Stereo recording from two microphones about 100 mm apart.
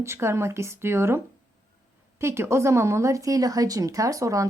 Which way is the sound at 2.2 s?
25° right (ahead or behind).